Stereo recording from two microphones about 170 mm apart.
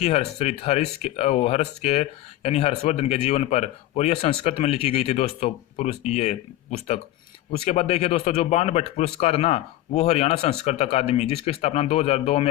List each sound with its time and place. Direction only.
0.0 s speech: 40° left (ahead or behind)